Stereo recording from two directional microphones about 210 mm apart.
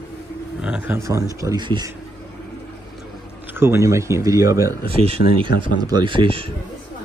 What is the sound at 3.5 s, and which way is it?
Speech, 10° right (ahead or behind).